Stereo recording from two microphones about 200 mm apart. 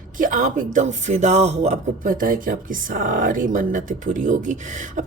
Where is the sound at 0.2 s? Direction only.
40° right (ahead or behind).